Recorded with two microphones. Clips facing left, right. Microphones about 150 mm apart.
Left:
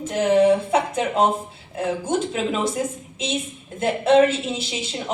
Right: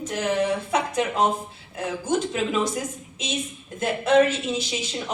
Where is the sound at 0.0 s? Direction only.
25° left (ahead or behind).